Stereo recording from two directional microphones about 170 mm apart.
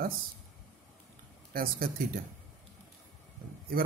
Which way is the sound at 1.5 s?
60° right (ahead or behind).